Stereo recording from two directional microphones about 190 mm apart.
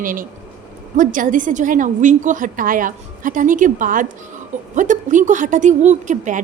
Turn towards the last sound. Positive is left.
turn(degrees=-40)  # may be behind; listen again after turning